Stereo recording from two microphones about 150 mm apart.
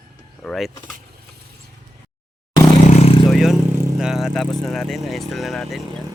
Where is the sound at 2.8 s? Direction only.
50° left (ahead or behind).